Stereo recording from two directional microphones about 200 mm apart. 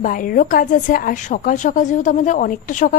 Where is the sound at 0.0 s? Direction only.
45° left (ahead or behind).